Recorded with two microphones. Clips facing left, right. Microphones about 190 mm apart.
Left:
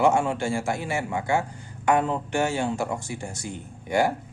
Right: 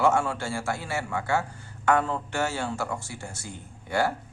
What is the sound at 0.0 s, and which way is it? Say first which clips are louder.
A man's voice: left 3 dB; 15° left (ahead or behind).